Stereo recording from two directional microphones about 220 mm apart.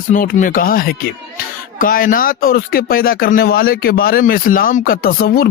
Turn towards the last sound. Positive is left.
turn(degrees=40)  # may be behind; listen again after turning